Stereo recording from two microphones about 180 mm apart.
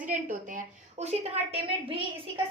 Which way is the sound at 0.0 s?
45° right (ahead or behind).